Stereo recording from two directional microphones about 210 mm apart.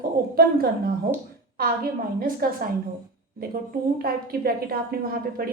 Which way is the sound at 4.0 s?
45° right (ahead or behind).